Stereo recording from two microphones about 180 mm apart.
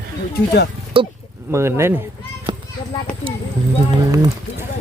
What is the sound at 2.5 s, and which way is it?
Children playing, 25° right (ahead or behind).